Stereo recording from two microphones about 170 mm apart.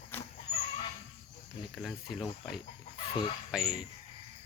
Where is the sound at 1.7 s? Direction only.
Centre (ahead or behind).